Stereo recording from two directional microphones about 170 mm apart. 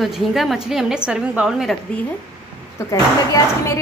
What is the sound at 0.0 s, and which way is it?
A woman's voice, centre (ahead or behind).